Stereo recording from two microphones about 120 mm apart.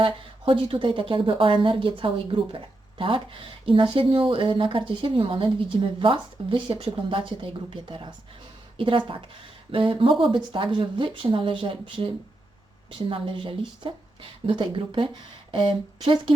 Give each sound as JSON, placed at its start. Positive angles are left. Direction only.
{"t": 0.0, "sound": "a woman's voice", "side_deg": -45}